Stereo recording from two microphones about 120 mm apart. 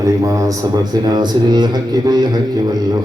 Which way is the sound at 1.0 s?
35° right (ahead or behind).